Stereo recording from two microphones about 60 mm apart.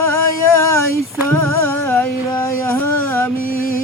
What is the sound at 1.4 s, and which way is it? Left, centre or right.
Music, left.